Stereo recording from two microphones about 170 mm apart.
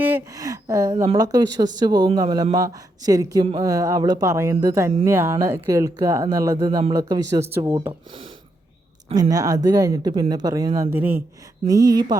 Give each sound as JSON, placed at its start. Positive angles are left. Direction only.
{"t": 0.0, "sound": "a sound", "side_deg": -15}
{"t": 1.1, "sound": "speech", "side_deg": -20}
{"t": 9.3, "sound": "speech", "side_deg": -20}
{"t": 10.8, "sound": "speech", "side_deg": -10}